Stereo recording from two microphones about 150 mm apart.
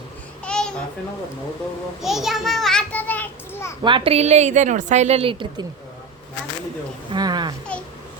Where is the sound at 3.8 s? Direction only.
35° right (ahead or behind).